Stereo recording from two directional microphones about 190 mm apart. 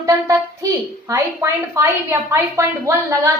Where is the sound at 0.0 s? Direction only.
15° right (ahead or behind).